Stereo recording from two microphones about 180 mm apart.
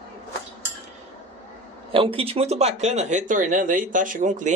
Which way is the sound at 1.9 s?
30° right (ahead or behind).